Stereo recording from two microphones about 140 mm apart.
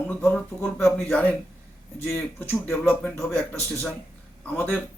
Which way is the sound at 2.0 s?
15° left (ahead or behind).